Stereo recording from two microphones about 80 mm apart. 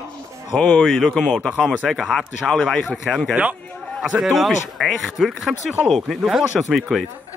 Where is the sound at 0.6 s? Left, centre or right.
Centre.